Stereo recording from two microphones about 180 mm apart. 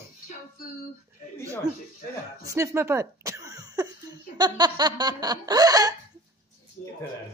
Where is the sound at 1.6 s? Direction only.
20° right (ahead or behind).